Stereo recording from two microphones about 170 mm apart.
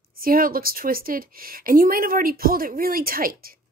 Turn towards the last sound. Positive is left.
turn(degrees=-60)  # may be behind; listen again after turning